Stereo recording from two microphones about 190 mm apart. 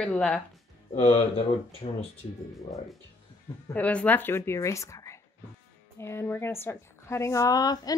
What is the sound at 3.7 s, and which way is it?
A woman's voice, 5° left (ahead or behind).